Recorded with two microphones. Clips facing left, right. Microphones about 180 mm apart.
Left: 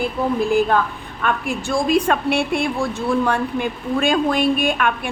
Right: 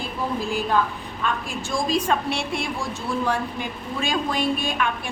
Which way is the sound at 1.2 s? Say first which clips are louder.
Left 5 dB; 60° left (ahead or behind).